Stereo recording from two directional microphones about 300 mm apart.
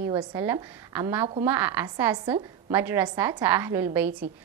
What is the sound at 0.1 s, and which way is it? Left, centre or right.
A woman's voice, centre.